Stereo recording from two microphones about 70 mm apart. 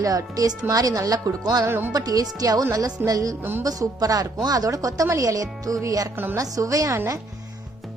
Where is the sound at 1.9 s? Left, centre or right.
Right.